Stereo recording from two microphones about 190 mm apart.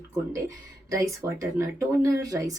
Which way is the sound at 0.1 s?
15° right (ahead or behind).